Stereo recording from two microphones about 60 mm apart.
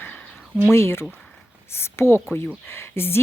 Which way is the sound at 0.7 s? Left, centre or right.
Left.